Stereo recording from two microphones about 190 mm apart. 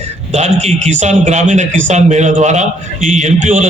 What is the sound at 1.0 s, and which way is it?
A man's voice, 35° right (ahead or behind).